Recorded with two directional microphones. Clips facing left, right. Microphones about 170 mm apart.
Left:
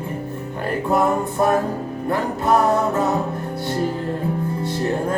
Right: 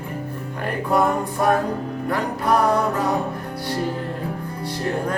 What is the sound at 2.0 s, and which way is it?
Music, 25° left (ahead or behind).